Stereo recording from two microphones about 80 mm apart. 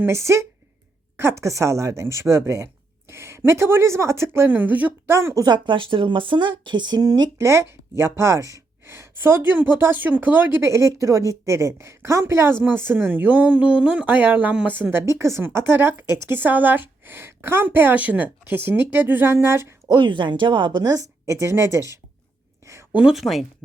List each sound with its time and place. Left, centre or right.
0.0 s speech: right
5.0 s speech: right
5.4 s speech: right
7.3 s speech: right; by 14.7 s centre
14.7 s speech: right
19.9 s speech: right
21.2 s speech: right
22.9 s speech: centre
23.1 s speech: centre